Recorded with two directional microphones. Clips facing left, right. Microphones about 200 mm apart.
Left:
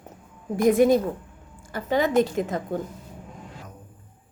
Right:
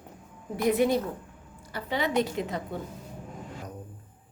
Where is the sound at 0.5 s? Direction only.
45° left (ahead or behind).